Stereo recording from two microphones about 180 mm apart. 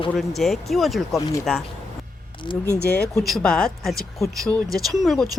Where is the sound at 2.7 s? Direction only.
60° left (ahead or behind).